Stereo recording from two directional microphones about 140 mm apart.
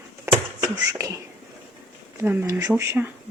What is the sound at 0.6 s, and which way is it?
Beatboxing, 20° right (ahead or behind).